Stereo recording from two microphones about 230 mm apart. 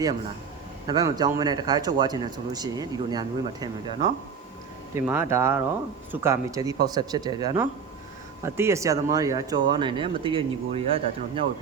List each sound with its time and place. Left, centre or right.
0.9 s speech: centre
4.9 s speech: centre